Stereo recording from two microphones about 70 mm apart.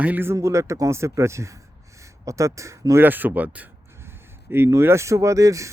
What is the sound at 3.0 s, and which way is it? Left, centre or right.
Speech, right.